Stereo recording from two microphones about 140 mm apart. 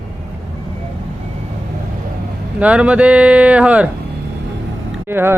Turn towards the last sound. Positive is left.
turn(degrees=-15)  # may be behind; listen again after turning